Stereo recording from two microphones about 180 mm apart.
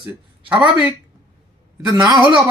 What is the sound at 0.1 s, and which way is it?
Speech, 10° right (ahead or behind).